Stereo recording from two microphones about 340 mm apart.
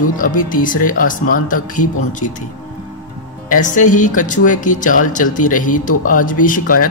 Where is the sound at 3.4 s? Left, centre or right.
Left.